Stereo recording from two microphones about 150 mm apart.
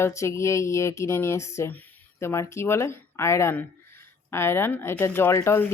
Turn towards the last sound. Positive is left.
turn(degrees=15)  # may be behind; listen again after turning